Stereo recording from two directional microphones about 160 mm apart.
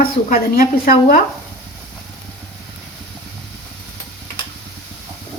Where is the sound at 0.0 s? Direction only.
60° left (ahead or behind).